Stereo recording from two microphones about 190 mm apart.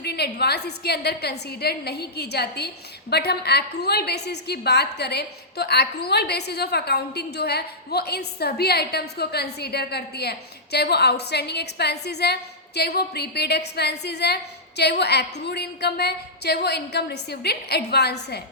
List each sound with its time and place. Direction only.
0.0 s a woman's voice: 60° left (ahead or behind)